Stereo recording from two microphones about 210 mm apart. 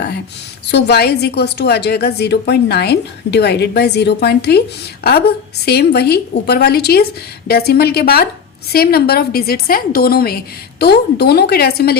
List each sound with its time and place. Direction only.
0.7 s a woman's voice: 50° left (ahead or behind)